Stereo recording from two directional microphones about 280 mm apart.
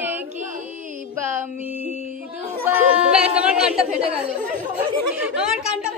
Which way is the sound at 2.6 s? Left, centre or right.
Centre.